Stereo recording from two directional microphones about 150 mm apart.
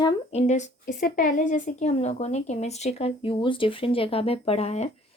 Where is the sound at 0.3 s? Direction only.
50° left (ahead or behind).